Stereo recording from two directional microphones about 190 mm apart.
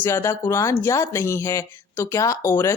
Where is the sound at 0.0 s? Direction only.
15° left (ahead or behind).